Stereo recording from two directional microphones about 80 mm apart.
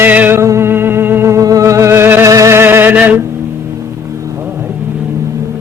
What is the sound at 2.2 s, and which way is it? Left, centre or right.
Music, right.